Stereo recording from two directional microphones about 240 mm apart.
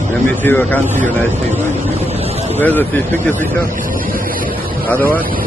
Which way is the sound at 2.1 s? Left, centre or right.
Right.